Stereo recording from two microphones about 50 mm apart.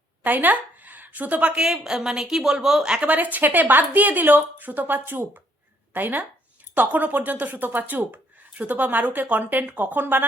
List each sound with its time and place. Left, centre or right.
0.2 s a woman's voice: right
1.6 s speech: centre
3.3 s speech: right